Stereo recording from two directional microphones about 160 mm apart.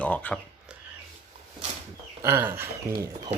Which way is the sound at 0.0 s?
10° left (ahead or behind).